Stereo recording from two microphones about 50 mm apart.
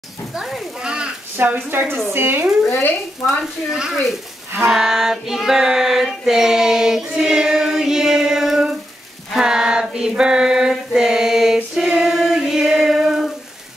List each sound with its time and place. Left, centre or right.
0.3 s a child's voice: centre
0.7 s a sound: centre
1.3 s a woman's voice: right
3.3 s female singing: centre
9.3 s a sound: centre
10.9 s female singing: centre